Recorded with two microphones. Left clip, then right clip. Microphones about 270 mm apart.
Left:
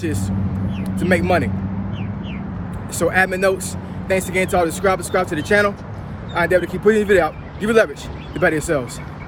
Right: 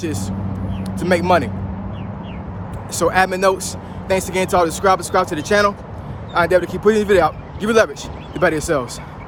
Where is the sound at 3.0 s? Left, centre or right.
Centre.